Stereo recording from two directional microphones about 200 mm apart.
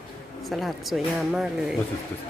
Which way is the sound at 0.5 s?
Centre (ahead or behind).